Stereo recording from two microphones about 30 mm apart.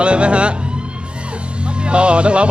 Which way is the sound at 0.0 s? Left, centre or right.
Right.